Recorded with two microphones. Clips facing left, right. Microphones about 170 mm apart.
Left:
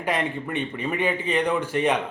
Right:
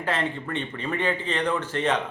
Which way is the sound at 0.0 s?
15° left (ahead or behind).